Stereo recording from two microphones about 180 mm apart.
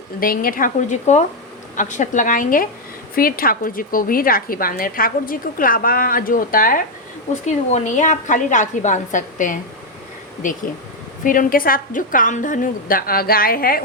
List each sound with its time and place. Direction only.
0.2 s a woman's voice: 55° left (ahead or behind)